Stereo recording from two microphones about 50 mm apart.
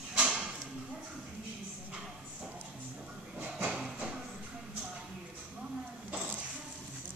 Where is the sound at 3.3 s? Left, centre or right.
Right.